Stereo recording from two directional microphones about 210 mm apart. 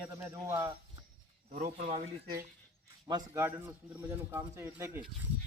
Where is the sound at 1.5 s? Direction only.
35° right (ahead or behind).